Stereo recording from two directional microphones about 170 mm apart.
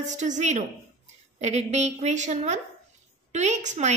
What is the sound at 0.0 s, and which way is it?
A woman's voice, 45° right (ahead or behind).